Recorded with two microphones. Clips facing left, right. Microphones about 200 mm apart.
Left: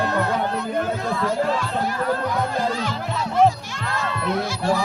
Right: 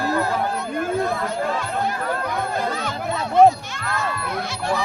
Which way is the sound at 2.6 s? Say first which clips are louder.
Left 1 dB; 55° right (ahead or behind).